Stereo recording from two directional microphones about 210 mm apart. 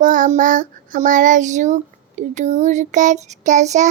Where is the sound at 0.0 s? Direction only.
40° right (ahead or behind).